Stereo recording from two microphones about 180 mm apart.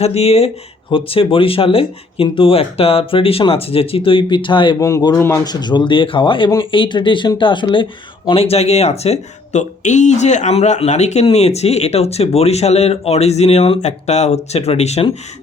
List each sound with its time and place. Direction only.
0.0 s speech: 35° left (ahead or behind)